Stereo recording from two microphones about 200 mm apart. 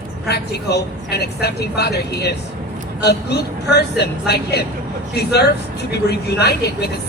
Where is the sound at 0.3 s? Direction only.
55° left (ahead or behind).